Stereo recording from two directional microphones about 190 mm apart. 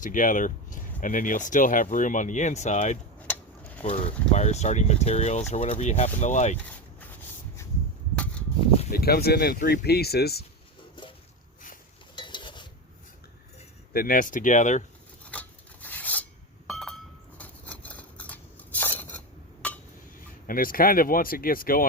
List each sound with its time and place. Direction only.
0.0 s speech: 45° left (ahead or behind)
8.1 s a sound: 5° left (ahead or behind)
8.9 s speech: 55° left (ahead or behind)
12.1 s stir: 25° left (ahead or behind)
13.9 s speech: 50° left (ahead or behind)
15.2 s rub: 5° left (ahead or behind)
16.6 s a sound: centre (ahead or behind)
20.2 s speech: 50° left (ahead or behind)